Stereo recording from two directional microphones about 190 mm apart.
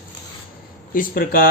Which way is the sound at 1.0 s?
45° left (ahead or behind).